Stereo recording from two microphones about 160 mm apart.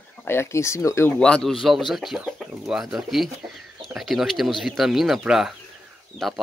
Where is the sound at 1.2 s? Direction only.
5° left (ahead or behind).